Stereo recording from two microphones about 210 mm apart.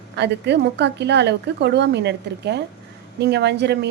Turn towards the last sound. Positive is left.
turn(degrees=-55)  # may be behind; listen again after turning